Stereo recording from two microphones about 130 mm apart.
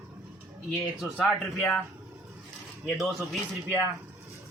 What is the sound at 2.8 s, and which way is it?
Speech, centre (ahead or behind).